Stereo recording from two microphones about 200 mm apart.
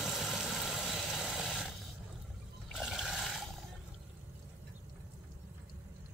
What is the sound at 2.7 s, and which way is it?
Water, centre (ahead or behind).